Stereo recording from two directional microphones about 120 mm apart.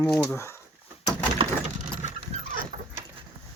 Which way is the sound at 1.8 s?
90° right.